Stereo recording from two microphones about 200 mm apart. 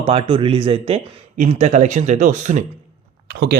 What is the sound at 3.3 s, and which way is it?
Speech, 55° right (ahead or behind).